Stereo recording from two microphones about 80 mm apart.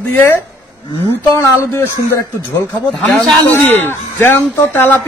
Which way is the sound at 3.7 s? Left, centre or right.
Left.